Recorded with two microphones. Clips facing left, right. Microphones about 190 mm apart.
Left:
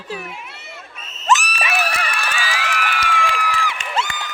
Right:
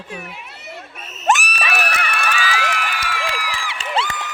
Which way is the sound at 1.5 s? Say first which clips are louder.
Left 1 dB; 25° left (ahead or behind).